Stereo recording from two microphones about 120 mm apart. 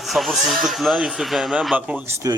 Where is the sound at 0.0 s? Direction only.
Centre (ahead or behind).